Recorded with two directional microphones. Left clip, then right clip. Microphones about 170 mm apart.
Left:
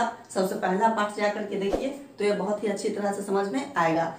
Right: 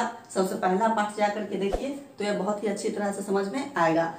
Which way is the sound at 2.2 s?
20° right (ahead or behind).